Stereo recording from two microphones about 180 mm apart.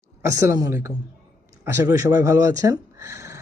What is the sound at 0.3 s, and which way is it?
Speech, 20° right (ahead or behind).